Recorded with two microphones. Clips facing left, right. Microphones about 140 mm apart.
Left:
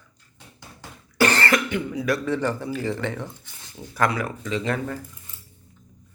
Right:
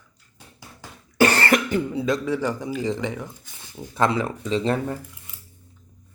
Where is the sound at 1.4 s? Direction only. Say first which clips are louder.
Right 2 dB; 35° right (ahead or behind).